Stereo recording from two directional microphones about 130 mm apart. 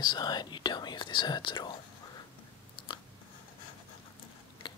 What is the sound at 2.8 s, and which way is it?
Chewing, 40° left (ahead or behind).